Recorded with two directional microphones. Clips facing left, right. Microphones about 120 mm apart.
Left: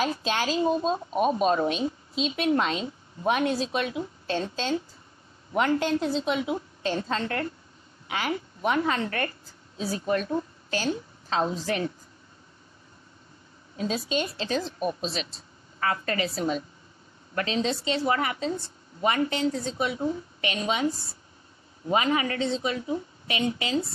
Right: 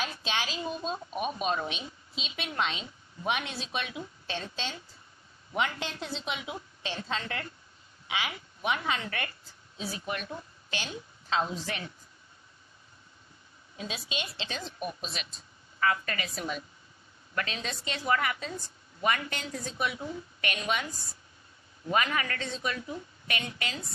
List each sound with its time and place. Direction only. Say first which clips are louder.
0.0 s a woman's voice: left 7 dB; 40° left (ahead or behind)
13.7 s a woman's voice: left 10 dB; 40° left (ahead or behind)
20.0 s a woman's voice: left 9 dB; 40° left (ahead or behind)
20.4 s a woman's voice: left 6 dB; 30° left (ahead or behind)